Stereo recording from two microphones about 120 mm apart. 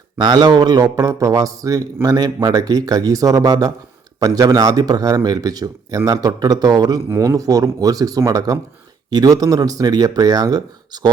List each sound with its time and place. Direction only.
0.2 s a man's voice: 35° right (ahead or behind)